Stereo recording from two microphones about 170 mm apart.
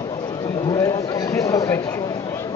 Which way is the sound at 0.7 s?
20° left (ahead or behind).